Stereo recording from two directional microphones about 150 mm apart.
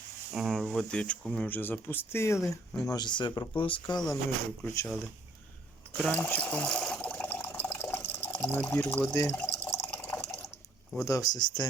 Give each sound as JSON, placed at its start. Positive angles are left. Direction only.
{"t": 0.3, "sound": "speech", "side_deg": 0}
{"t": 4.6, "sound": "speech", "side_deg": 20}
{"t": 6.0, "sound": "water", "side_deg": 10}
{"t": 11.0, "sound": "speech", "side_deg": 25}